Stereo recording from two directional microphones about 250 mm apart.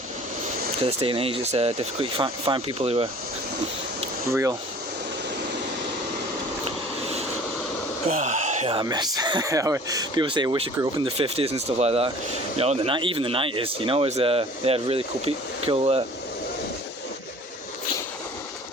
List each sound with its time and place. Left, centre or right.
0.9 s speech: right
4.3 s speech: centre
8.0 s speech: right